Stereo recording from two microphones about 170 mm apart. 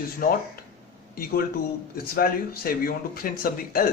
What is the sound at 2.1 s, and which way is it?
Speech, 60° left (ahead or behind).